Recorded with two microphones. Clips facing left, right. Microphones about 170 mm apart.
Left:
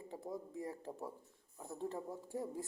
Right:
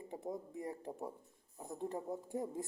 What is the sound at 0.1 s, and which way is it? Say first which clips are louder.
Speech: right 2 dB; 20° right (ahead or behind).